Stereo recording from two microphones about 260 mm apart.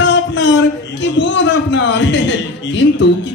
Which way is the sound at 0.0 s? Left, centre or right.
Left.